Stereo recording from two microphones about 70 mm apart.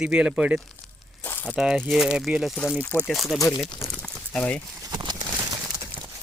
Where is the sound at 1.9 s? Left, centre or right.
Centre.